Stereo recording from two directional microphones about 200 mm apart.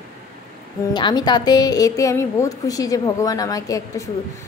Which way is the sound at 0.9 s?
20° left (ahead or behind).